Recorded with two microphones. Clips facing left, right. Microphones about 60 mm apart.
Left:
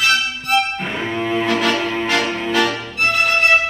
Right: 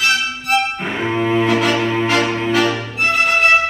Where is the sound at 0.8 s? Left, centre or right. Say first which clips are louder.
Right 3 dB; centre.